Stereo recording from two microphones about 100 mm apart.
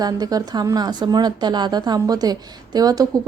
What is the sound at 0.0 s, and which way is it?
A woman's voice, 40° right (ahead or behind).